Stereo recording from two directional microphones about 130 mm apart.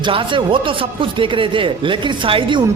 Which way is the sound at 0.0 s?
40° right (ahead or behind).